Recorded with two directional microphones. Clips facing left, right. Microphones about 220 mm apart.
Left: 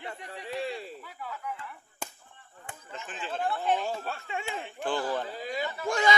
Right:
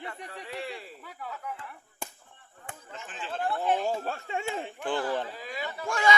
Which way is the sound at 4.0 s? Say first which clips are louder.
Right 3 dB; 40° right (ahead or behind).